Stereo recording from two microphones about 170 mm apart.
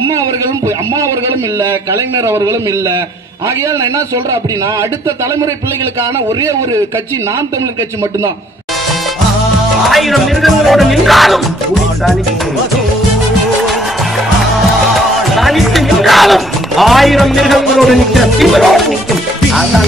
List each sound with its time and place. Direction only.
2.1 s a man's voice: 15° right (ahead or behind)
9.8 s music: centre (ahead or behind)
15.0 s music: centre (ahead or behind)